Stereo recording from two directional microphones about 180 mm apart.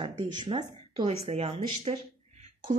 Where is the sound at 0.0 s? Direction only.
25° right (ahead or behind).